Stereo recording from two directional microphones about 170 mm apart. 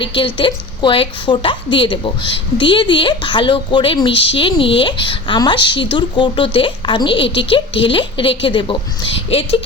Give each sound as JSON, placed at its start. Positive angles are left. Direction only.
{"t": 0.3, "sound": "a woman's voice", "side_deg": 30}